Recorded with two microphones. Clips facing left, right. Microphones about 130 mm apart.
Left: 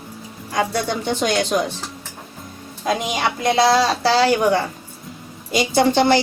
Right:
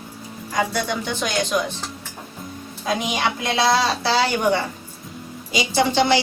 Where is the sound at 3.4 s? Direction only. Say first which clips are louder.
Left 5 dB; 45° left (ahead or behind).